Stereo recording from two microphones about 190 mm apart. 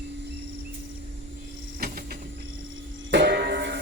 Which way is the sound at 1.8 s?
50° right (ahead or behind).